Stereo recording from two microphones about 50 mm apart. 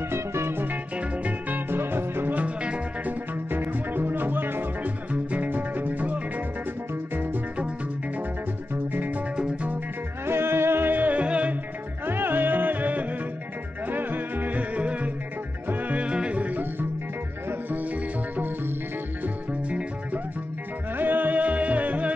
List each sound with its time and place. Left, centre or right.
0.1 s music: right
0.9 s music: right
1.7 s music: right
2.3 s music: right
3.4 s music: right
5.1 s music: right
8.9 s music: right
10.2 s music: right
12.1 s music: right
19.2 s music: right